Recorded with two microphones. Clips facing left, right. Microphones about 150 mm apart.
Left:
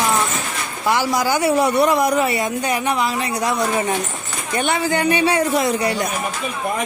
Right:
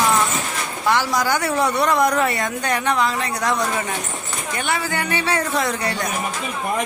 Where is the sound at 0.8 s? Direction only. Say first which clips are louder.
Left 1 dB; 10° left (ahead or behind).